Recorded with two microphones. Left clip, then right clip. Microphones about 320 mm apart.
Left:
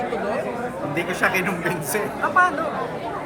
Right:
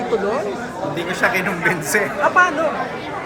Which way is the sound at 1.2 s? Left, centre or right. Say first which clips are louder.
Right 5 dB; centre.